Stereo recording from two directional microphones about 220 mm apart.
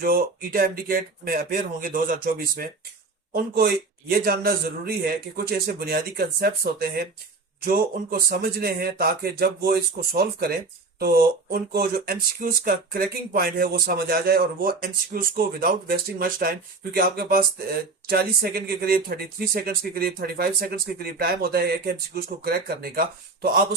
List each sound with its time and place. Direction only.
0.0 s speech: 40° right (ahead or behind)